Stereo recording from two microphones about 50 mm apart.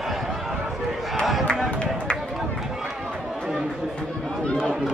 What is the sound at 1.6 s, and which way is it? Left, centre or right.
Run, centre.